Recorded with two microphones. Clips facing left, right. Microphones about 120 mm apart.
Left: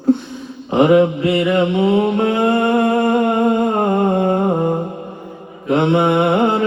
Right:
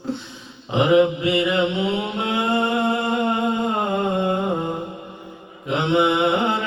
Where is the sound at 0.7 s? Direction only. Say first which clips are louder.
Left 4 dB; 45° left (ahead or behind).